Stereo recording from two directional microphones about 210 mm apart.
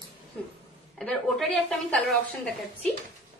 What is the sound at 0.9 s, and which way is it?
A woman's voice, centre (ahead or behind).